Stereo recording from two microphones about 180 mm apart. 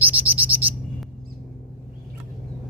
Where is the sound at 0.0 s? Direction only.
10° right (ahead or behind).